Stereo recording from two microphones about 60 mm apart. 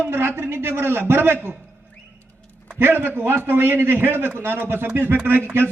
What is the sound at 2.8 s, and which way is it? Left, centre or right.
A man's voice, right.